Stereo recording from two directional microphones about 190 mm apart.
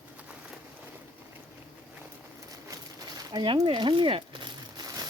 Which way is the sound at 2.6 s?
20° right (ahead or behind).